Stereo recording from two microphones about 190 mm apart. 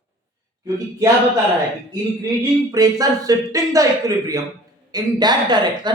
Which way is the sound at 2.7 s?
20° right (ahead or behind).